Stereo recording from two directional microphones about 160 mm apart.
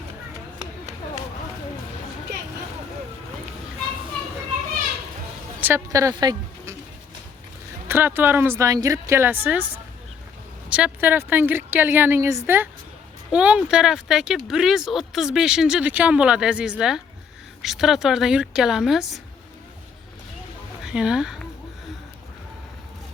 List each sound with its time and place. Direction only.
0.6 s run: 45° right (ahead or behind)
5.5 s a woman's voice: 15° right (ahead or behind)
7.9 s a woman's voice: 15° right (ahead or behind)
10.7 s a woman's voice: 10° right (ahead or behind)
20.8 s speech: 5° right (ahead or behind)